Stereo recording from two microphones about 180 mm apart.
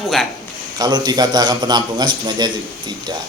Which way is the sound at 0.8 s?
20° right (ahead or behind).